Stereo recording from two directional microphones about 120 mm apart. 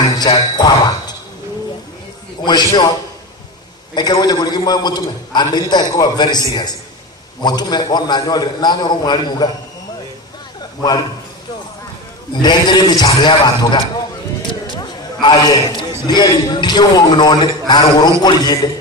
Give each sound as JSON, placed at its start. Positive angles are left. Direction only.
{"t": 0.2, "sound": "a man's voice", "side_deg": 35}
{"t": 2.4, "sound": "a man's voice", "side_deg": 35}
{"t": 3.9, "sound": "a man's voice", "side_deg": 35}
{"t": 12.4, "sound": "a man's voice", "side_deg": 35}